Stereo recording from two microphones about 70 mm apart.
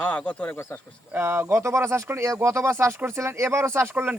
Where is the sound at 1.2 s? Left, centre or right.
Right.